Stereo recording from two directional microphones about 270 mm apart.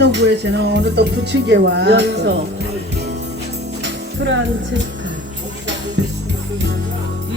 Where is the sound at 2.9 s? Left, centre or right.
Right.